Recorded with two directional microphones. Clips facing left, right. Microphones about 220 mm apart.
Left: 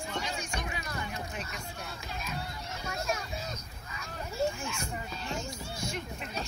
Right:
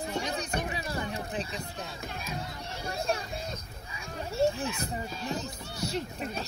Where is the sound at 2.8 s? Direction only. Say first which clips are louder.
Right 3 dB; 30° right (ahead or behind).